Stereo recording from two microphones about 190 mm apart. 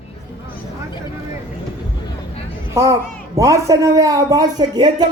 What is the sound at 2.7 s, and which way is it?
A child's voice, 15° right (ahead or behind).